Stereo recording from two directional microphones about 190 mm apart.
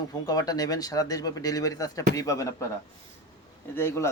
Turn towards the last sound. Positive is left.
turn(degrees=15)  # may be behind; listen again after turning